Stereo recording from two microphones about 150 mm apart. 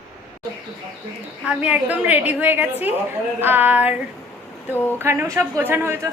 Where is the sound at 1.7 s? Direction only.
10° right (ahead or behind).